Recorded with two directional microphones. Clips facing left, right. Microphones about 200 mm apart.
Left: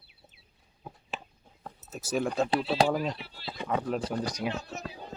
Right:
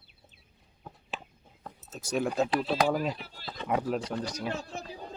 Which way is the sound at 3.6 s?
10° right (ahead or behind).